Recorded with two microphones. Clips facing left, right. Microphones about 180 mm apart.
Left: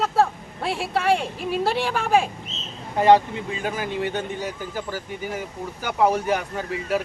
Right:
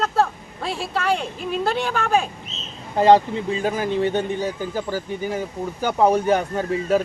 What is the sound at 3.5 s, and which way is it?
Speech, 35° right (ahead or behind).